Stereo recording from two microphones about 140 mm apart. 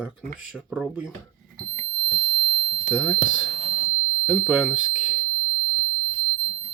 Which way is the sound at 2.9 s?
5° right (ahead or behind).